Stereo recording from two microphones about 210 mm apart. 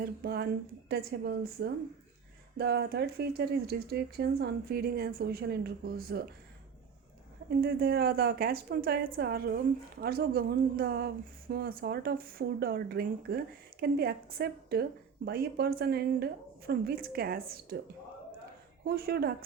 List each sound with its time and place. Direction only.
0.0 s a woman's voice: 45° right (ahead or behind)
7.6 s a woman's voice: 45° right (ahead or behind)
18.9 s a woman's voice: 50° right (ahead or behind)